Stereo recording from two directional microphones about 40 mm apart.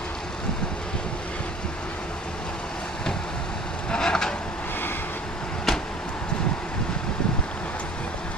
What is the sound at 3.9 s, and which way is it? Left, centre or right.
Vehicle, centre.